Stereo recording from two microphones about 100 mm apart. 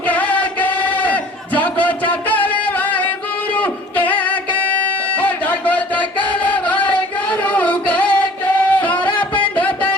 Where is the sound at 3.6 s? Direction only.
15° left (ahead or behind).